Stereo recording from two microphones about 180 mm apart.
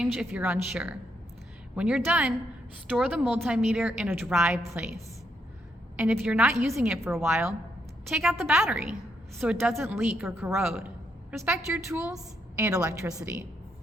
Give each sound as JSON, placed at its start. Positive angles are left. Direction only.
{"t": 0.0, "sound": "a woman's voice", "side_deg": 0}
{"t": 4.6, "sound": "a woman's voice", "side_deg": -15}
{"t": 6.0, "sound": "a woman's voice", "side_deg": -5}
{"t": 8.1, "sound": "a woman's voice", "side_deg": 0}